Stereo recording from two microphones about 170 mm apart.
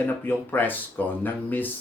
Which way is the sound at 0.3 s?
10° left (ahead or behind).